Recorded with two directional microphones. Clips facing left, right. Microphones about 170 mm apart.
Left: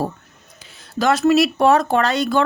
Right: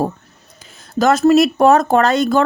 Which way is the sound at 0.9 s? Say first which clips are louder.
Right 4 dB; 45° right (ahead or behind).